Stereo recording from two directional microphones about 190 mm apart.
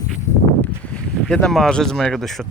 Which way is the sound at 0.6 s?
5° left (ahead or behind).